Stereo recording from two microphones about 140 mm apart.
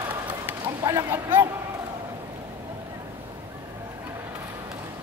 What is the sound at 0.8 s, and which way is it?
Speech, 20° right (ahead or behind).